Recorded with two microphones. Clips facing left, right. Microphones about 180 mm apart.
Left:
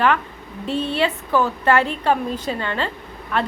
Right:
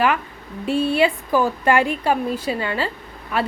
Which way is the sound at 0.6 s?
10° right (ahead or behind).